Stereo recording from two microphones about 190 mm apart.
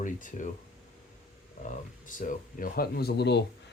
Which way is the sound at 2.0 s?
45° left (ahead or behind).